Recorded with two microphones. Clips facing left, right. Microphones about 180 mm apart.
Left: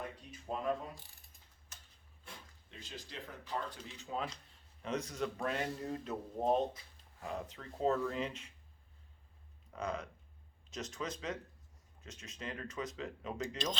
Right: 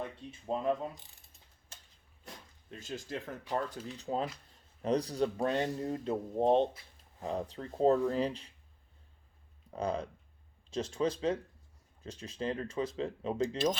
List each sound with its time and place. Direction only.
0.3 s speech: 25° right (ahead or behind)
1.7 s a sound: 30° right (ahead or behind)
2.2 s speech: 45° right (ahead or behind)
3.9 s speech: 35° right (ahead or behind)
9.7 s speech: 30° right (ahead or behind)